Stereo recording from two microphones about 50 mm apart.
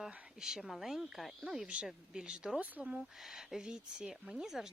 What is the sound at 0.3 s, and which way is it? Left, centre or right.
Speech, centre.